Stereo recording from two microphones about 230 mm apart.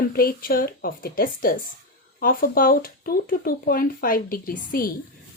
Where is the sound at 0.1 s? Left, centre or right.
Left.